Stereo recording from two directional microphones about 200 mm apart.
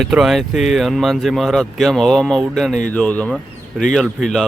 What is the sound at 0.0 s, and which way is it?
Speech, centre (ahead or behind).